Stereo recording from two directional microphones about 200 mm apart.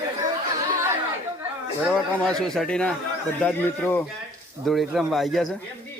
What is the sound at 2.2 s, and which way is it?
Speech, 5° left (ahead or behind).